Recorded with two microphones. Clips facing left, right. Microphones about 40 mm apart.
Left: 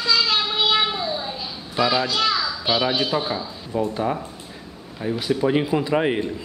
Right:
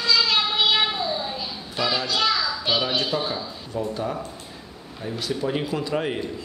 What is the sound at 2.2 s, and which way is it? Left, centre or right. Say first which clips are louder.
Children playing: left 1 dB; centre.